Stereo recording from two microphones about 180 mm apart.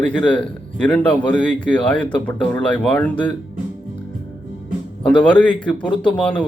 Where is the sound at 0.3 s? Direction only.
5° left (ahead or behind).